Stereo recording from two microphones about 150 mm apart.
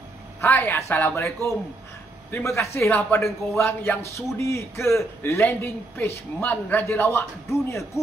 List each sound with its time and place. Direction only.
0.4 s a man's voice: 15° left (ahead or behind)
2.9 s a man's voice: 5° left (ahead or behind)